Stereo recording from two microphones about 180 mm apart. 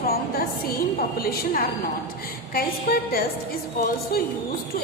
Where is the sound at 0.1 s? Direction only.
55° left (ahead or behind).